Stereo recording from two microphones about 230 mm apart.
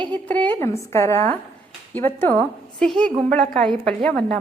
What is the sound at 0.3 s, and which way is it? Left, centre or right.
A woman's voice, centre.